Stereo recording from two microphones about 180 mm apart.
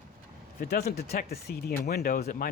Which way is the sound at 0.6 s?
60° left (ahead or behind).